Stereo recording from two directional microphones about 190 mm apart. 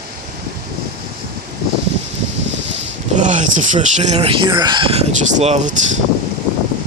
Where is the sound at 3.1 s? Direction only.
40° right (ahead or behind).